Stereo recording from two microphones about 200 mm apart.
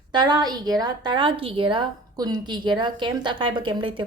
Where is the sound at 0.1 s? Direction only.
20° right (ahead or behind).